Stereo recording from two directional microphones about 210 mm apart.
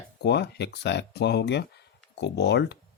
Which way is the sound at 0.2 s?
55° left (ahead or behind).